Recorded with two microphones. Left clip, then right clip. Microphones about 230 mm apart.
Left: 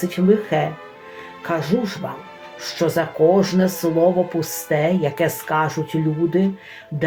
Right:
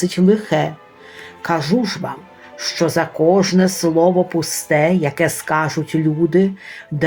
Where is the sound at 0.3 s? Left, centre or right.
Right.